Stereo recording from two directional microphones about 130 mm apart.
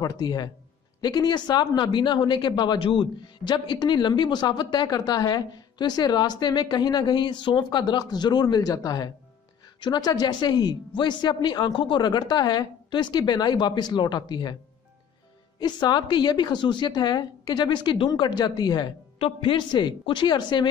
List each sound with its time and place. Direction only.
0.0 s speech: 30° left (ahead or behind)
15.6 s speech: 35° left (ahead or behind)